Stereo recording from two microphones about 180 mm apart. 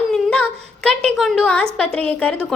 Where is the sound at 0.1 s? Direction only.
5° left (ahead or behind).